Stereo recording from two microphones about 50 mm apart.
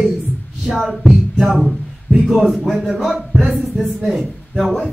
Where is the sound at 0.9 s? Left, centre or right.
Centre.